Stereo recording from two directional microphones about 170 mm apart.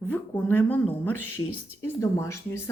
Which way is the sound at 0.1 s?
10° left (ahead or behind).